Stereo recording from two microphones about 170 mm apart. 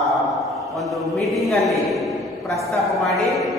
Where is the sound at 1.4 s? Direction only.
Centre (ahead or behind).